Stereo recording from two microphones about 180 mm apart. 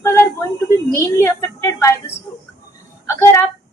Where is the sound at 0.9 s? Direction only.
15° left (ahead or behind).